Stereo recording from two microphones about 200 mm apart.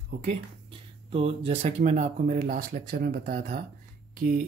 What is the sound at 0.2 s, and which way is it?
Speech, 30° right (ahead or behind).